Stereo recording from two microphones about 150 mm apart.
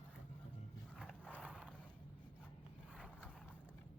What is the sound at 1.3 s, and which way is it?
Mechanisms, 10° right (ahead or behind).